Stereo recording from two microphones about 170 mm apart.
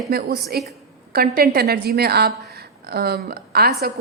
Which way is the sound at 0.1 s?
65° right (ahead or behind).